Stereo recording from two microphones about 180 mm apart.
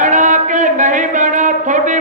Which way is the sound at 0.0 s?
45° right (ahead or behind).